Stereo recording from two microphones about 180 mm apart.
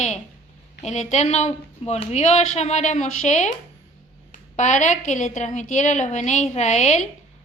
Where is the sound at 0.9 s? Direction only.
40° left (ahead or behind).